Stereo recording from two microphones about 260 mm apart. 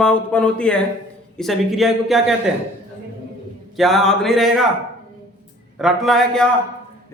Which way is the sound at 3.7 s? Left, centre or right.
Centre.